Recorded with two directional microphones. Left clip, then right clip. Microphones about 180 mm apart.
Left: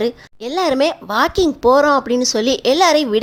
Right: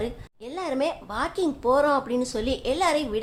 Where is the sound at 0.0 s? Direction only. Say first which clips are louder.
Left 12 dB; 35° left (ahead or behind).